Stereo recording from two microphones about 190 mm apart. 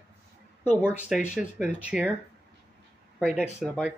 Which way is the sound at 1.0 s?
5° right (ahead or behind).